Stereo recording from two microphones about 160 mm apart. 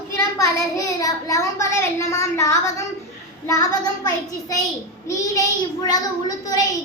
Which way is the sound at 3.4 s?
20° left (ahead or behind).